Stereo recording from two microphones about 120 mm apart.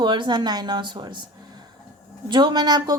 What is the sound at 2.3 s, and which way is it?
Speech, 40° right (ahead or behind).